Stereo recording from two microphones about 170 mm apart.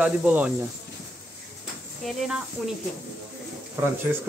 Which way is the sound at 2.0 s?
Centre (ahead or behind).